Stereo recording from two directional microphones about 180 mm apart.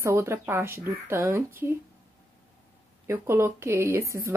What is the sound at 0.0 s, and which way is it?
A woman's voice, 15° right (ahead or behind).